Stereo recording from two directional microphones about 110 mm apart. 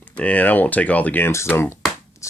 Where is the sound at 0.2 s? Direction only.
15° left (ahead or behind).